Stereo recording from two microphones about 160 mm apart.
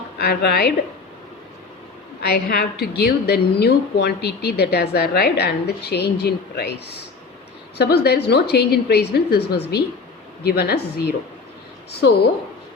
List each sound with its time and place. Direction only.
0.2 s a woman's voice: 90° left
2.2 s a woman's voice: 80° left
7.8 s a woman's voice: 90° left